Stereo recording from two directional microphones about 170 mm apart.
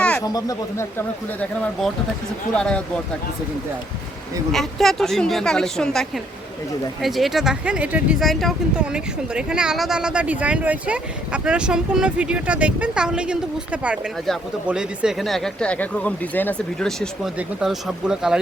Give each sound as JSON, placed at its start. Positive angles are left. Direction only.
{"t": 0.2, "sound": "speech", "side_deg": 20}
{"t": 2.6, "sound": "speech", "side_deg": 5}
{"t": 4.5, "sound": "speech", "side_deg": 0}